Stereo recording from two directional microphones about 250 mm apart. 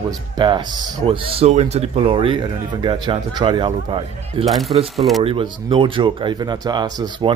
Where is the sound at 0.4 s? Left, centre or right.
Centre.